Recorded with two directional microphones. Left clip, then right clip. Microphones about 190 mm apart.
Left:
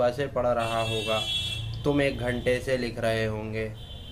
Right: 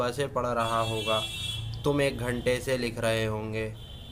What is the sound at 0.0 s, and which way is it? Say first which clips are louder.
Speech: left 4 dB; 25° right (ahead or behind).